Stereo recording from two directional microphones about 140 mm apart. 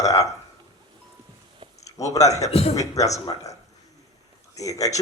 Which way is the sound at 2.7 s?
25° left (ahead or behind).